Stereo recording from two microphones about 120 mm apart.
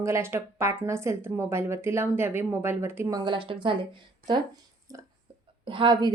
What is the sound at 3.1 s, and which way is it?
Speech, 45° right (ahead or behind).